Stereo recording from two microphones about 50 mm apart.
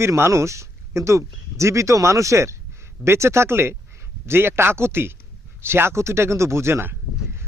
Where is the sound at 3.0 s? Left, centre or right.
Right.